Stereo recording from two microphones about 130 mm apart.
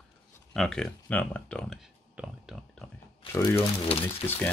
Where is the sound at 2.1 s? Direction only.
5° right (ahead or behind).